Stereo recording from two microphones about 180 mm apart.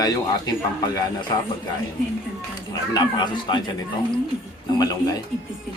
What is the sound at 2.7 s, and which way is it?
Speech, 20° left (ahead or behind).